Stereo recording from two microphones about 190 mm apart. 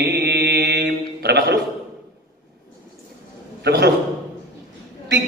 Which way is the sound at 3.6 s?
60° right (ahead or behind).